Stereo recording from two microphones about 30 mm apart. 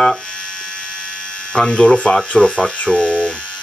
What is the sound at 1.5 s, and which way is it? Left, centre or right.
Speech, left.